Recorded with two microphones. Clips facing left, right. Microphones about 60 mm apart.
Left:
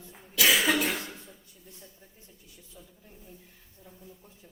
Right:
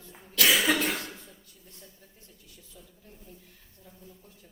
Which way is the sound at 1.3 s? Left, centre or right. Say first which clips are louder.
Left 2 dB; centre.